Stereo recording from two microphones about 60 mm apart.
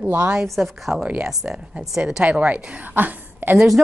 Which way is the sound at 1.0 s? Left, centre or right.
Centre.